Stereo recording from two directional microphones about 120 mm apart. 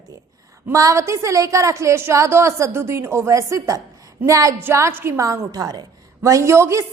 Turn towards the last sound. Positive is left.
turn(degrees=-25)  # may be behind; listen again after turning